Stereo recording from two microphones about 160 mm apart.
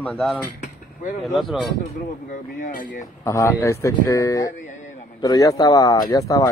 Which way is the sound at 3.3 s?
15° left (ahead or behind).